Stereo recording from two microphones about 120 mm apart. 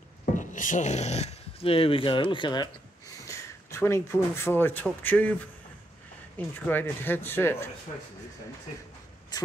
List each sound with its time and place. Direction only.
0.2 s speech: 90° left; by 2.7 s 40° left (ahead or behind)
3.3 s a man's voice: 20° left (ahead or behind)
6.3 s speech: 15° left (ahead or behind)
9.3 s speech: 30° left (ahead or behind)